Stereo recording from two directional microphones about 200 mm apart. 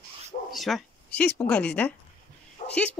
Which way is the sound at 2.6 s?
40° left (ahead or behind).